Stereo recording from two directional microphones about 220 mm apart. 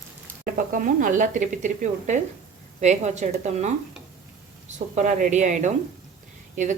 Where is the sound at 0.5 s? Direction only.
35° right (ahead or behind).